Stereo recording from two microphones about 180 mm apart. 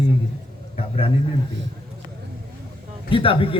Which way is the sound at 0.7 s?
30° left (ahead or behind).